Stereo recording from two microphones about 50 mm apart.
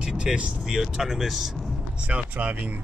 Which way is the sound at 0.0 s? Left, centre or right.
Centre.